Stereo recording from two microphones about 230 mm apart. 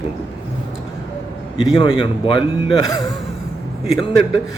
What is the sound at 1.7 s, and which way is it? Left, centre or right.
Speech, left.